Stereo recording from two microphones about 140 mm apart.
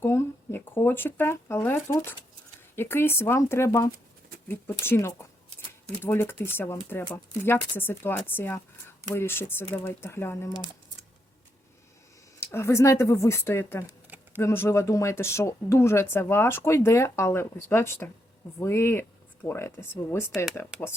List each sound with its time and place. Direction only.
0.0 s a sound: 20° left (ahead or behind)
2.7 s speech: 15° left (ahead or behind)
12.4 s speech: 20° left (ahead or behind)
13.8 s a sound: 15° right (ahead or behind)
14.4 s speech: 20° left (ahead or behind)
20.7 s speech: 5° right (ahead or behind)